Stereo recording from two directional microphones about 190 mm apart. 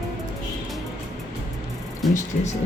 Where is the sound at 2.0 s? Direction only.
Centre (ahead or behind).